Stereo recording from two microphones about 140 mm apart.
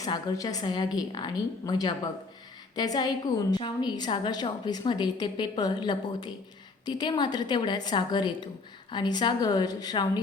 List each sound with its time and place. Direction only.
0.0 s a woman's voice: 30° left (ahead or behind)